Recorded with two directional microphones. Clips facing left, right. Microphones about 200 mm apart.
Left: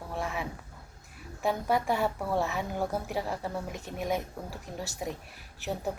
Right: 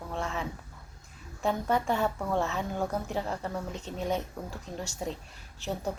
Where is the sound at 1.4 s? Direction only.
15° left (ahead or behind).